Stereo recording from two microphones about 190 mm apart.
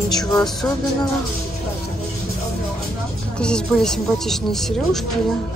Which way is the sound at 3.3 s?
5° left (ahead or behind).